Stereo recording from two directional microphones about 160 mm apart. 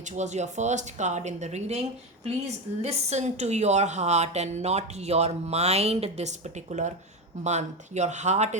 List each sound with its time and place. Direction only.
0.2 s a woman's voice: 45° right (ahead or behind)
2.8 s a woman's voice: 45° right (ahead or behind)